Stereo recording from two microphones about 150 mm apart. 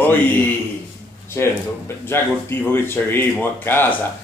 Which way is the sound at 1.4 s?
15° left (ahead or behind).